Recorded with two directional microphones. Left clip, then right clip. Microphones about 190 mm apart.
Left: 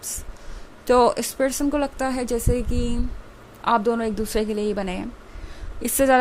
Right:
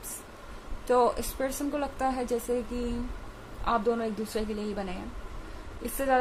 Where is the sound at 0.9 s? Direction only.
40° left (ahead or behind).